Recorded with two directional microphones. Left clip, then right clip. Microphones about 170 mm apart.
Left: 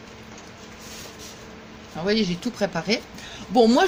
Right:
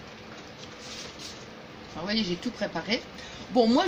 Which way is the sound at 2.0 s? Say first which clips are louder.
Left 6 dB; 65° left (ahead or behind).